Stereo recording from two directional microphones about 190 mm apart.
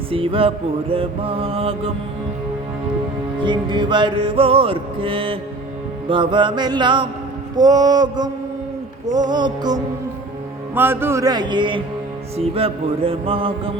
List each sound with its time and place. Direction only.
0.1 s music: 30° right (ahead or behind)
3.4 s music: 25° right (ahead or behind)